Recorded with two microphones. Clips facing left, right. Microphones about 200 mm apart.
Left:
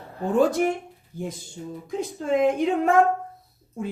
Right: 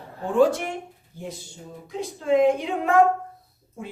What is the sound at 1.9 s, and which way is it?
Speech, 45° left (ahead or behind).